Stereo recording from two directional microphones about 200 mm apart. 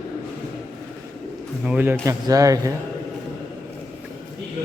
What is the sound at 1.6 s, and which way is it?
Speech, 10° right (ahead or behind).